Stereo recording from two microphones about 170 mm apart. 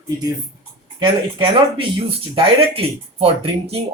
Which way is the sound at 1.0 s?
30° right (ahead or behind).